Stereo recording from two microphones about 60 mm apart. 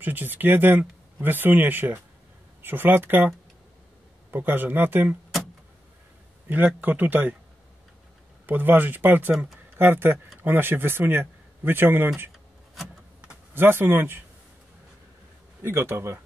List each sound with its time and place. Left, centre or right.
0.0 s speech: right
4.3 s speech: right
6.5 s speech: right
8.5 s speech: right
13.6 s speech: right
15.6 s speech: right